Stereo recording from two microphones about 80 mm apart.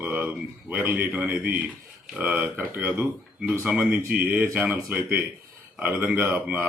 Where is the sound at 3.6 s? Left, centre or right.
Centre.